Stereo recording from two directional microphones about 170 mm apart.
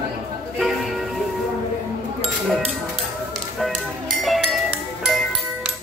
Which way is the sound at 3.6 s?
Centre (ahead or behind).